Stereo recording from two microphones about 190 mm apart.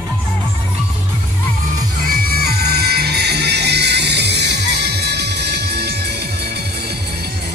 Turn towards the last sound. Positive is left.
turn(degrees=-60)  # may be behind; listen again after turning